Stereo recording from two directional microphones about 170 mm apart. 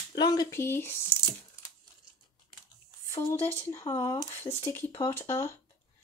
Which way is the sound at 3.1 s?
15° left (ahead or behind).